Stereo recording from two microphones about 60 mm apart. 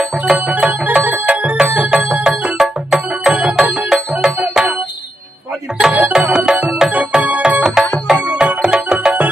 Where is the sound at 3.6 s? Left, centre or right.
Right.